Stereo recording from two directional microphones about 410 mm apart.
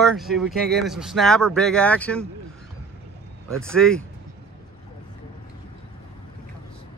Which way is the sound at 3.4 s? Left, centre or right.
Centre.